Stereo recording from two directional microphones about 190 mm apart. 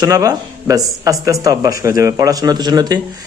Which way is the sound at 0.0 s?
20° right (ahead or behind).